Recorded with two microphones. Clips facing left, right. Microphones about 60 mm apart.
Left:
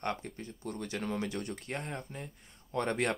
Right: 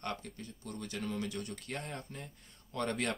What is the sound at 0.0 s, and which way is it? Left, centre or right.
Speech, left.